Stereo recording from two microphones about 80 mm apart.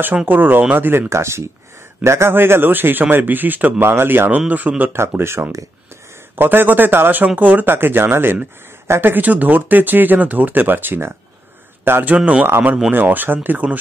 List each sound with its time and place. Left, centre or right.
0.0 s a man's voice: right